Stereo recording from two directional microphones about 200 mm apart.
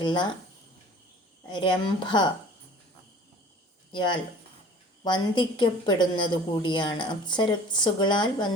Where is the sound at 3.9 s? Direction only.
25° left (ahead or behind).